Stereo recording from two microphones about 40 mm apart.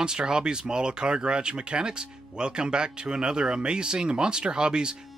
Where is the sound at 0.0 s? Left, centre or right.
Centre.